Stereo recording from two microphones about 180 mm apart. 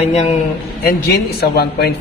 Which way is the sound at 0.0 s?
40° left (ahead or behind).